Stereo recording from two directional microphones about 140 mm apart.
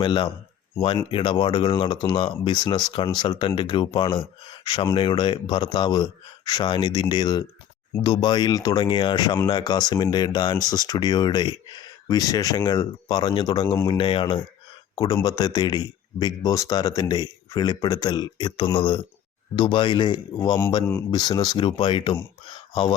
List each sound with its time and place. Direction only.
0.0 s speech: 35° left (ahead or behind)
14.9 s speech: 25° left (ahead or behind)